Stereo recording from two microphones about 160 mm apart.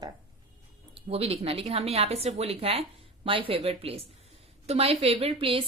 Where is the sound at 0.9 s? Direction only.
40° right (ahead or behind).